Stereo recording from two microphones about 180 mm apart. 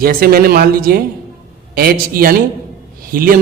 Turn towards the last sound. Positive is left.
turn(degrees=-50)  # may be behind; listen again after turning